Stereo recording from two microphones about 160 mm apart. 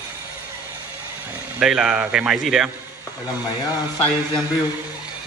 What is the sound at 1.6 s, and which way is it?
Speech, 5° right (ahead or behind).